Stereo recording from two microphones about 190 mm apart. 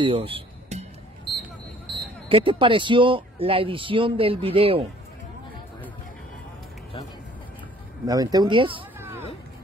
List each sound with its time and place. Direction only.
0.0 s music: 30° right (ahead or behind)
2.2 s speech: 30° right (ahead or behind)
8.1 s speech: 20° right (ahead or behind)